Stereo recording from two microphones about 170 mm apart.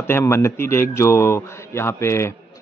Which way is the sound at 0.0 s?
15° left (ahead or behind).